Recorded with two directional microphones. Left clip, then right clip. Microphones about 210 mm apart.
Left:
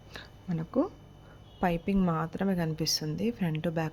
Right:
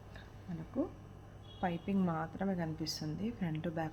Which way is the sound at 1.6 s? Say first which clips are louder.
Left 8 dB; 40° left (ahead or behind).